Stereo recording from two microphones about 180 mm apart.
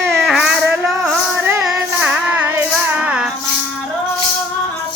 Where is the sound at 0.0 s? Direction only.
Centre (ahead or behind).